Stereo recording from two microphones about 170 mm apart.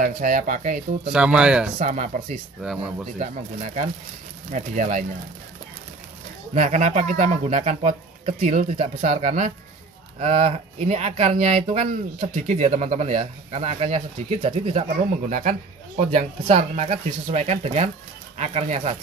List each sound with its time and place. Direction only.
0.0 s speech: 50° right (ahead or behind)
1.1 s speech: 5° right (ahead or behind)
1.8 s speech: 45° right (ahead or behind)
2.6 s speech: 5° right (ahead or behind)
3.2 s speech: 40° right (ahead or behind)
6.5 s speech: 45° right (ahead or behind)